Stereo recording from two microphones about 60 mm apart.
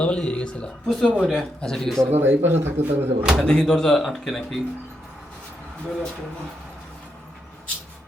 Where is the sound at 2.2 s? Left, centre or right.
Right.